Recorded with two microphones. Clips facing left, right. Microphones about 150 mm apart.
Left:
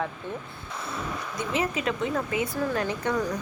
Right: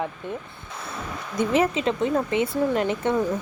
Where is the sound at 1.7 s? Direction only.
25° right (ahead or behind).